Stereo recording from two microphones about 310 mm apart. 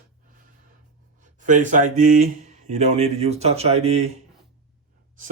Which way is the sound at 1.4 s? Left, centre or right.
Right.